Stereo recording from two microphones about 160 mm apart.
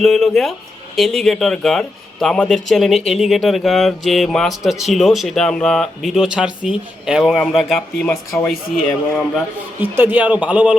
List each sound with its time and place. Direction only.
0.0 s speech: centre (ahead or behind)
8.1 s speech: 20° left (ahead or behind)
9.8 s speech: 10° right (ahead or behind)